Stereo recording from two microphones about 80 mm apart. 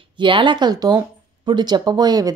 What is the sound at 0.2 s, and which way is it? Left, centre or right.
Speech, right.